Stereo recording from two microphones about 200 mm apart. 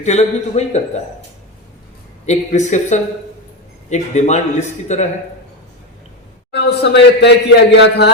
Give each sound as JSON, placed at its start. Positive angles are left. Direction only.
{"t": 0.0, "sound": "a man's voice", "side_deg": 35}
{"t": 2.2, "sound": "a man's voice", "side_deg": 35}
{"t": 6.5, "sound": "a man's voice", "side_deg": 55}